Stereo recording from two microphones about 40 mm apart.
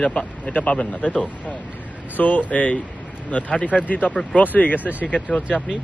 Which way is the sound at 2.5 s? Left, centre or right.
Left.